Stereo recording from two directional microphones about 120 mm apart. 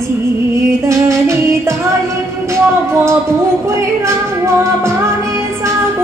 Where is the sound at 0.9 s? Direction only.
25° right (ahead or behind).